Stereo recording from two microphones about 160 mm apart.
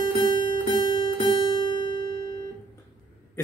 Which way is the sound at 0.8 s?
30° left (ahead or behind).